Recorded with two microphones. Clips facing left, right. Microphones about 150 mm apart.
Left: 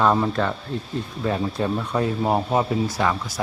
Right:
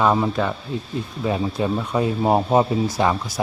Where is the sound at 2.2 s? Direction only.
20° right (ahead or behind).